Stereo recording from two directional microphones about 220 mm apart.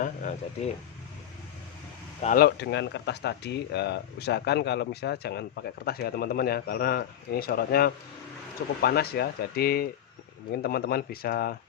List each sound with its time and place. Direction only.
0.0 s speech: 35° left (ahead or behind)
2.2 s speech: 40° left (ahead or behind)